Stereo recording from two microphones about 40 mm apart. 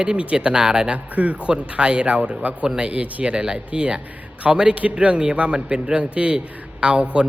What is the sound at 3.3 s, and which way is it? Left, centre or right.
A man's voice, right.